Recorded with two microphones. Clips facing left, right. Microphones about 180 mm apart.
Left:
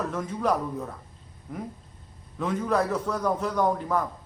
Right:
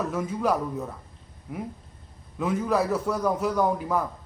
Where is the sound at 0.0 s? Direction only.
10° right (ahead or behind).